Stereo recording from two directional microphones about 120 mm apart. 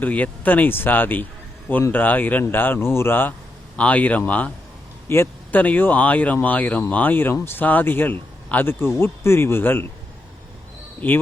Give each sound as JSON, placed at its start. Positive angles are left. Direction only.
{"t": 0.0, "sound": "speech", "side_deg": 15}